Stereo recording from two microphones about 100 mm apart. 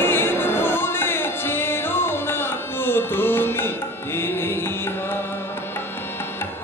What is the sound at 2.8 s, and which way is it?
Music, 20° left (ahead or behind).